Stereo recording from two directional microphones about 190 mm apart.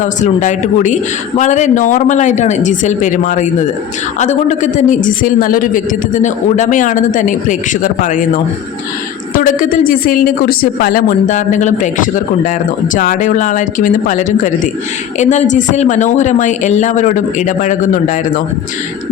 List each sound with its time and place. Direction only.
0.0 s a woman's voice: 40° left (ahead or behind)
9.3 s a woman's voice: 45° left (ahead or behind)